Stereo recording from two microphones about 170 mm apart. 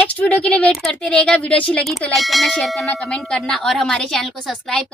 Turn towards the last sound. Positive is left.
turn(degrees=0)  # may be behind; listen again after turning